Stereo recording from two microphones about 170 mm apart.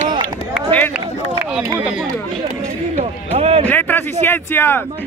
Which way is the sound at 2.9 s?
35° right (ahead or behind).